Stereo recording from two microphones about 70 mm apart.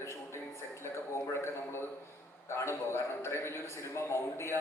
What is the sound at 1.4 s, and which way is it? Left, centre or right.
A man's voice, left.